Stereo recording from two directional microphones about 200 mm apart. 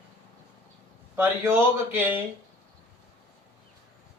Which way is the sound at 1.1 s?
10° right (ahead or behind).